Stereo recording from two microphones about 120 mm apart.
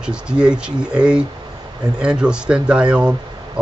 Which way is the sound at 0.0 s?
10° right (ahead or behind).